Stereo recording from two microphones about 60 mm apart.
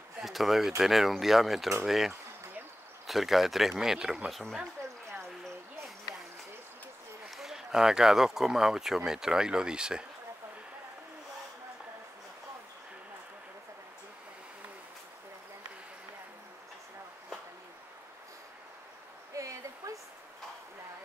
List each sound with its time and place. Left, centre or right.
0.2 s speech: centre
4.3 s speech: centre
7.2 s speech: centre
19.3 s a sound: right